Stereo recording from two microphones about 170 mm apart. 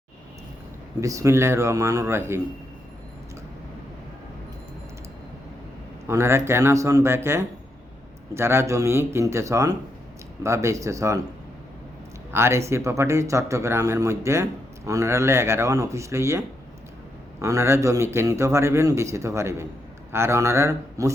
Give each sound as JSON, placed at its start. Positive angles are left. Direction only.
{"t": 1.0, "sound": "speech", "side_deg": -20}
{"t": 6.1, "sound": "speech", "side_deg": -15}
{"t": 12.3, "sound": "speech", "side_deg": -15}
{"t": 17.4, "sound": "speech", "side_deg": -15}